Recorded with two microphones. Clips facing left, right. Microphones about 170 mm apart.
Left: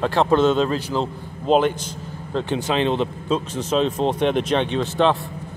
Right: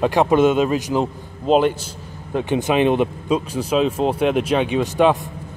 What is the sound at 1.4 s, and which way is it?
Speech, centre (ahead or behind).